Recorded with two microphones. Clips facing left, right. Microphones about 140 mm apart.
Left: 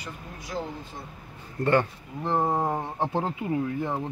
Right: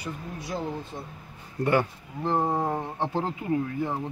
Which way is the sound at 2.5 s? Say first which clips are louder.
Left 1 dB; 10° left (ahead or behind).